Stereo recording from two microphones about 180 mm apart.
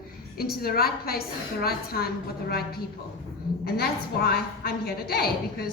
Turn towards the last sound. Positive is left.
turn(degrees=60)  # may be behind; listen again after turning